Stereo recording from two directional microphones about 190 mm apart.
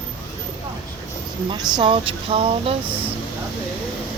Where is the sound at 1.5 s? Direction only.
25° right (ahead or behind).